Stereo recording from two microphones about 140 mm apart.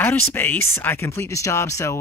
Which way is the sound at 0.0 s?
15° left (ahead or behind).